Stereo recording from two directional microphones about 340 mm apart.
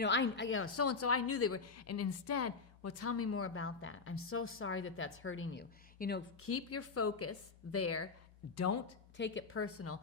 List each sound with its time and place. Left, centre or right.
0.0 s a woman's voice: left
9.1 s a woman's voice: left